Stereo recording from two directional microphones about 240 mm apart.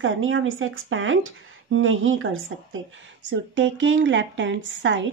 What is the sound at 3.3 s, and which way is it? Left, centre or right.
A woman's voice, right.